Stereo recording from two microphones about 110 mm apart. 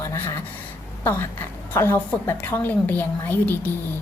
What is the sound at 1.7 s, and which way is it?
A woman's voice, 20° left (ahead or behind).